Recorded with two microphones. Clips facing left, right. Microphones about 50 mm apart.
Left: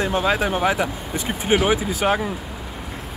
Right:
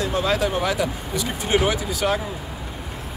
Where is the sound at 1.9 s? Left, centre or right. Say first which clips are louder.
Left 2 dB; left.